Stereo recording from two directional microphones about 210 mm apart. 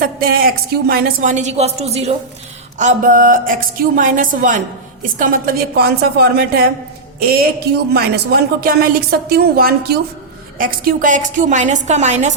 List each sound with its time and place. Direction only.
0.0 s a woman's voice: 45° right (ahead or behind)